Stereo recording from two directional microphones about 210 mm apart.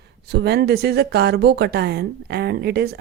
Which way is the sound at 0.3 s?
50° right (ahead or behind).